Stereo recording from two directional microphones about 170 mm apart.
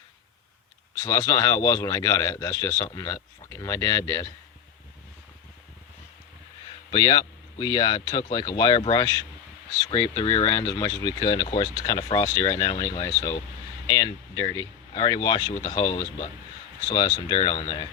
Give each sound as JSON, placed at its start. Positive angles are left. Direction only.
{"t": 0.9, "sound": "speech", "side_deg": 20}
{"t": 6.9, "sound": "speech", "side_deg": 30}